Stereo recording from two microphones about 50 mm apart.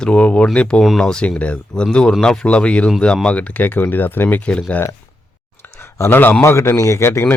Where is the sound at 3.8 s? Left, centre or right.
Left.